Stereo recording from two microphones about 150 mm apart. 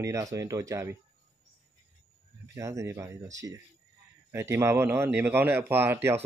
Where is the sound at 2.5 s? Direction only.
20° right (ahead or behind).